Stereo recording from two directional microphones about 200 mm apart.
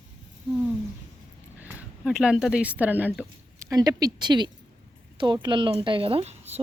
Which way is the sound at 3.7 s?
20° right (ahead or behind).